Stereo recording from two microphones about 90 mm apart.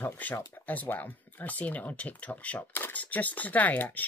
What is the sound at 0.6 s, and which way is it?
Speech, 20° left (ahead or behind).